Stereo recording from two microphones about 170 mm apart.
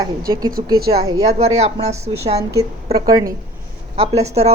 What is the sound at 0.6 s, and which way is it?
Speech, 30° right (ahead or behind).